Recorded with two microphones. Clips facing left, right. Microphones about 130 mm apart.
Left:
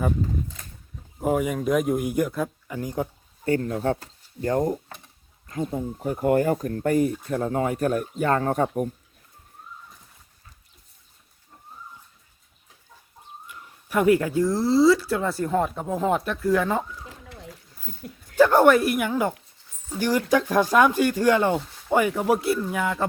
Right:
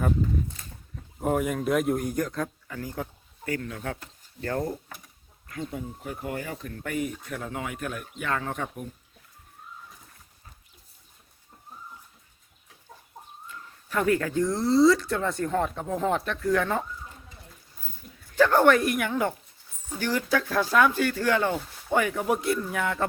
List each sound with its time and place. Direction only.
1.2 s speech: centre (ahead or behind); by 3.1 s 20° left (ahead or behind)
3.4 s speech: 30° left (ahead or behind)
4.4 s speech: 20° left (ahead or behind); by 8.9 s 45° left (ahead or behind)
13.5 s a sound: 15° left (ahead or behind)
14.4 s speech: 5° left (ahead or behind)
17.0 s a sound: 85° left
18.3 s speech: 15° left (ahead or behind)